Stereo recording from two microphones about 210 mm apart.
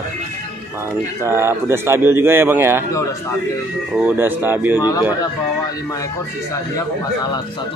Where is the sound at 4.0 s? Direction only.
10° right (ahead or behind).